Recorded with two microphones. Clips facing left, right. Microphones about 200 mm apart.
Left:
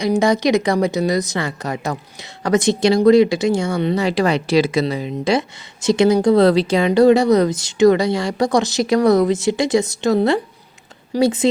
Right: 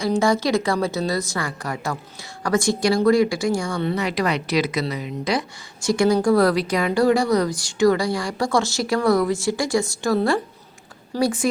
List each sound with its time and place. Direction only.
0.0 s speech: 20° left (ahead or behind)